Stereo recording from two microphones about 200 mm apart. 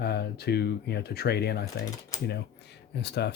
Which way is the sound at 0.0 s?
55° left (ahead or behind).